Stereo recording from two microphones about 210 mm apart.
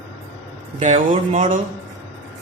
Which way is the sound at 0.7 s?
35° right (ahead or behind).